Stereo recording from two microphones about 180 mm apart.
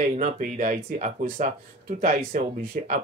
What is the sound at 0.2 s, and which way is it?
Speech, 45° right (ahead or behind).